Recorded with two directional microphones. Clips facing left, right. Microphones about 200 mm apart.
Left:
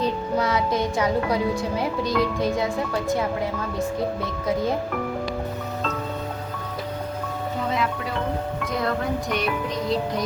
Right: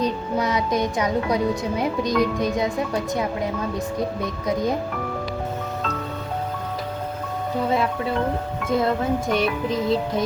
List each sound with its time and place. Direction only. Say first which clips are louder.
0.0 s music: even; 15° right (ahead or behind)
1.8 s speech: right 3 dB; 15° right (ahead or behind)
9.4 s speech: right 3 dB; centre (ahead or behind)